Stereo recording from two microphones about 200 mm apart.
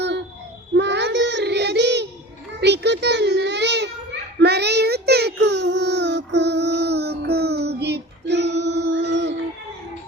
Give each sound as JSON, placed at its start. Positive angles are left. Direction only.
{"t": 0.8, "sound": "child singing", "side_deg": -60}
{"t": 2.6, "sound": "a sound", "side_deg": -55}
{"t": 4.4, "sound": "child singing", "side_deg": -55}